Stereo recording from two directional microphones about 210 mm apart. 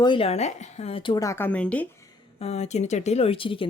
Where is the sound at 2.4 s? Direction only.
30° left (ahead or behind).